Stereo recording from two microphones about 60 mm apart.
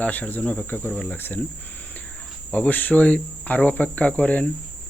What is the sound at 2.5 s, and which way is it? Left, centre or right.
Speech, left.